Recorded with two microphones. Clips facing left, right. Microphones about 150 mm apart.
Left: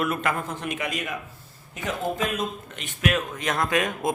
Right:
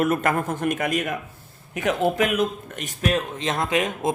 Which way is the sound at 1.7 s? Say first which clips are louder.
Right 7 dB; 70° right (ahead or behind).